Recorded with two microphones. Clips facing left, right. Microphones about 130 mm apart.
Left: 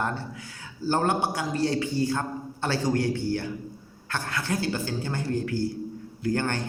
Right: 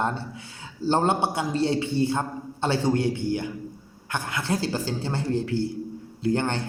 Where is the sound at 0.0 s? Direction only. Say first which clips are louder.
Right 2 dB; 25° right (ahead or behind).